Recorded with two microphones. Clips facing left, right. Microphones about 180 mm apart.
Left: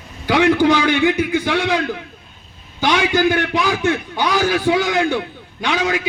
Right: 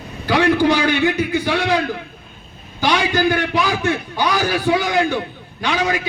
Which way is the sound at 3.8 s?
20° left (ahead or behind).